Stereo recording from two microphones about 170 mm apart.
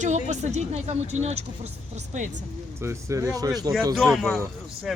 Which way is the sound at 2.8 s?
15° right (ahead or behind).